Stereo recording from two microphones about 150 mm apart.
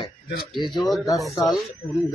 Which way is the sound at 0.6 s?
30° left (ahead or behind).